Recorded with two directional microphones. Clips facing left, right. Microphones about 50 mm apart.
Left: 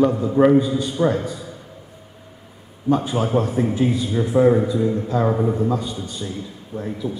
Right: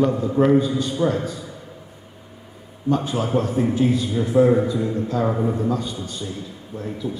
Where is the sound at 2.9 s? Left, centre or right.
Centre.